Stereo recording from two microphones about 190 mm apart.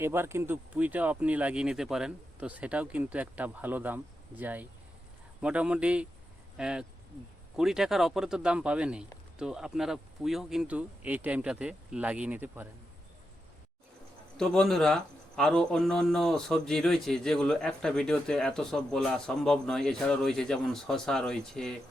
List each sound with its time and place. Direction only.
0.0 s a man's voice: 15° right (ahead or behind)
14.3 s a man's voice: 5° left (ahead or behind)